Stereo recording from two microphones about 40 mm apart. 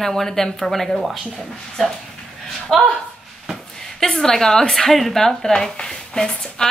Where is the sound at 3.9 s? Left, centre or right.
Centre.